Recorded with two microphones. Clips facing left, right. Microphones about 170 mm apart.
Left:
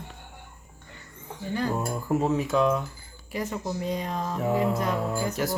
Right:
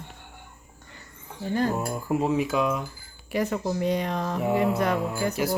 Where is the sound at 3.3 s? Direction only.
70° right (ahead or behind).